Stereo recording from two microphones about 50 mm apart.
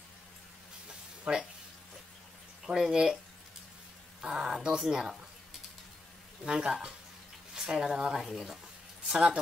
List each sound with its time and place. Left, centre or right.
1.3 s speech: right
2.6 s speech: centre
4.2 s a sound: centre
6.4 s speech: centre
9.1 s speech: right